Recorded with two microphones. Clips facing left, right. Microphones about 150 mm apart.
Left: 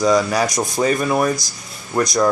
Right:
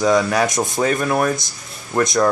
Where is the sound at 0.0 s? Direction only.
Centre (ahead or behind).